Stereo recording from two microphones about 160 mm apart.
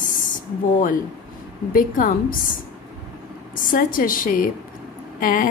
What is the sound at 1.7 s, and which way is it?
Speech, 60° left (ahead or behind).